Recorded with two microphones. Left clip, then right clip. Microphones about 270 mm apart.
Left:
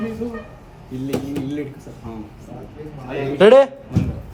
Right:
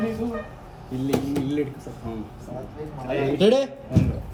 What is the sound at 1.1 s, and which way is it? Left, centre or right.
Speech, centre.